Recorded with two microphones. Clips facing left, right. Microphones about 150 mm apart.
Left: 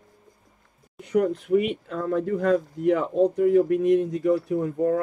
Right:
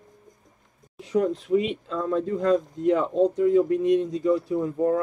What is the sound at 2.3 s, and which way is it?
Speech, 20° right (ahead or behind).